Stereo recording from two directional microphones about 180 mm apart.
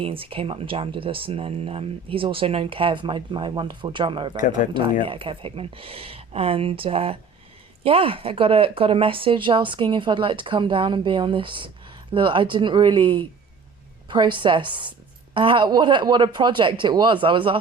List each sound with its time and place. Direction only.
0.0 s speech: 30° right (ahead or behind)
4.4 s speech: 45° left (ahead or behind)
5.0 s speech: 30° right (ahead or behind)